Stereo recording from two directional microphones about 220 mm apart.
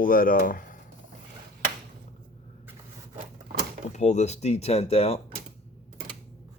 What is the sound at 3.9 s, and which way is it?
Speech, 30° left (ahead or behind).